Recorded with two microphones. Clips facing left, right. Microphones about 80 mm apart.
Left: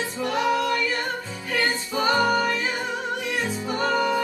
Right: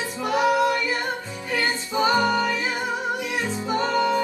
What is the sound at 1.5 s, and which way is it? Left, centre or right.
Music, centre.